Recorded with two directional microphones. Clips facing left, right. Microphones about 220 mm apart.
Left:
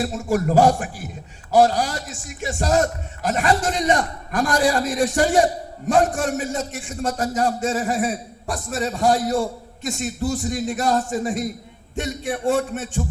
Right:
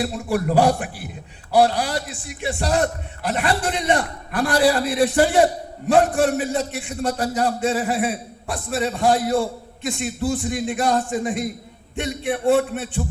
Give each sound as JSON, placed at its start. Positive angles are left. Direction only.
{"t": 0.0, "sound": "a man's voice", "side_deg": 45}